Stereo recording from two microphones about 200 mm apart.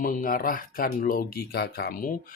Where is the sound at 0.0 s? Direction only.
45° left (ahead or behind).